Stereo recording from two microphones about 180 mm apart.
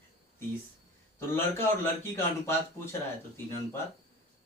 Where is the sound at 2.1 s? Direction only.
15° left (ahead or behind).